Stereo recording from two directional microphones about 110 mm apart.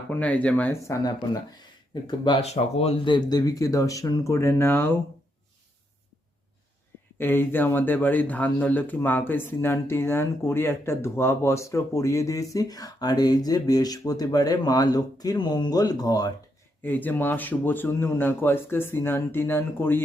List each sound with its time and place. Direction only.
0.1 s speech: 15° left (ahead or behind)
0.9 s speech: 30° left (ahead or behind)
2.4 s speech: 70° left (ahead or behind); by 4.9 s 20° left (ahead or behind)
7.2 s speech: 20° left (ahead or behind); by 16.3 s 35° left (ahead or behind)
16.8 s speech: 15° left (ahead or behind)